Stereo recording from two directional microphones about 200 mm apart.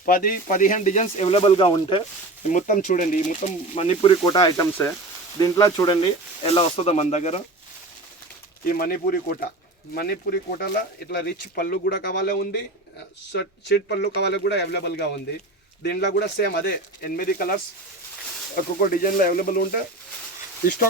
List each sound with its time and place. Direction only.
0.0 s speech: 45° left (ahead or behind); by 2.0 s 25° left (ahead or behind)
2.5 s speech: 40° left (ahead or behind)
8.6 s speech: 45° left (ahead or behind)